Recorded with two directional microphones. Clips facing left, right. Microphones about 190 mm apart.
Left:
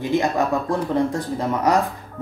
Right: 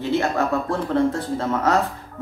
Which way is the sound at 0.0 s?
15° left (ahead or behind).